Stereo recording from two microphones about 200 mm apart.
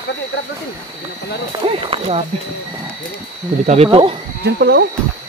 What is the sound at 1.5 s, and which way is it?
Run, 30° right (ahead or behind).